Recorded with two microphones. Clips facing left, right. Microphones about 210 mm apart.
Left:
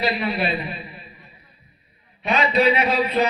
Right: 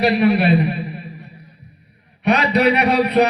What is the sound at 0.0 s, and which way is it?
Speech, 70° right (ahead or behind).